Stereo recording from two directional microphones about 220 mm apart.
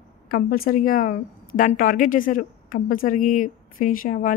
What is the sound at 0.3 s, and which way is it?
Speech, 40° left (ahead or behind).